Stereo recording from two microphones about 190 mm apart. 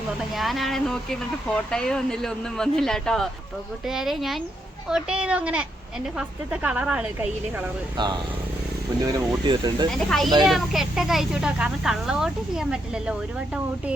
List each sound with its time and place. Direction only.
0.3 s speech: centre (ahead or behind)
7.9 s speech: 25° right (ahead or behind)
10.1 s speech: centre (ahead or behind)